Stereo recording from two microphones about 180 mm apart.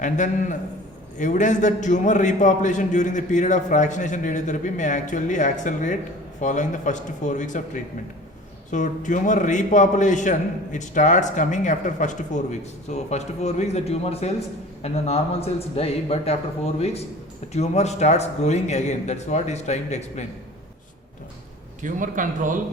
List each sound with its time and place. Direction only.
0.0 s a man's voice: 45° left (ahead or behind)
17.5 s speech: 35° left (ahead or behind)
21.8 s a man's voice: 45° right (ahead or behind)